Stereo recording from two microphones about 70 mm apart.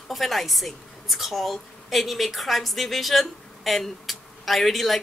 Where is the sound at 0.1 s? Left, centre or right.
Centre.